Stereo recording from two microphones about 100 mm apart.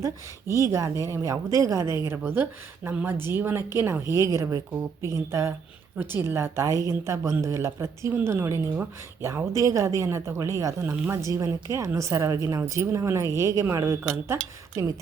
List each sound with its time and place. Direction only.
0.6 s a woman's voice: 30° right (ahead or behind)